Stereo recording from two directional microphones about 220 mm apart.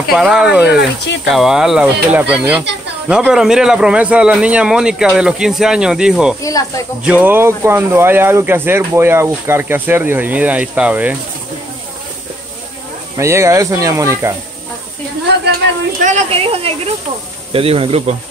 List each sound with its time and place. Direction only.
0.1 s a man's voice: centre (ahead or behind)
0.7 s speech: 50° left (ahead or behind)
1.2 s a man's voice: centre (ahead or behind)
13.2 s speech: 10° right (ahead or behind)
16.0 s speech: 30° right (ahead or behind)